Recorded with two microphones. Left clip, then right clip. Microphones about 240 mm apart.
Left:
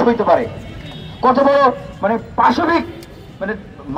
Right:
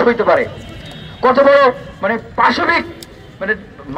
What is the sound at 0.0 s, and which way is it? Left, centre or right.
Speech, right.